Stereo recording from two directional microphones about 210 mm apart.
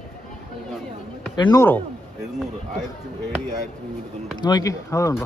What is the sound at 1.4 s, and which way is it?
Speech, 15° left (ahead or behind).